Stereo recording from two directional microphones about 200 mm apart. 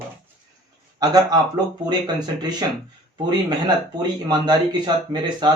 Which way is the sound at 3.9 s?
20° right (ahead or behind).